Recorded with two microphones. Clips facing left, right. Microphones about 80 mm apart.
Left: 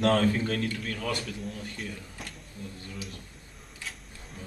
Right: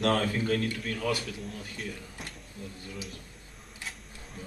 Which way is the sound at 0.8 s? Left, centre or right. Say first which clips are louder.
Right 1 dB; centre.